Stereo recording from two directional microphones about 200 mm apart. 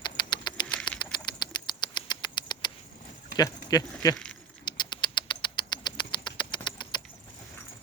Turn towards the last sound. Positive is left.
turn(degrees=20)  # may be behind; listen again after turning